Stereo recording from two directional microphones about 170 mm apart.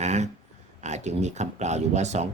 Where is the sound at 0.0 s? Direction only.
40° right (ahead or behind).